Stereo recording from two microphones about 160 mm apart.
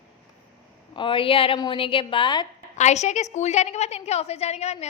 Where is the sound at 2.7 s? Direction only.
45° left (ahead or behind).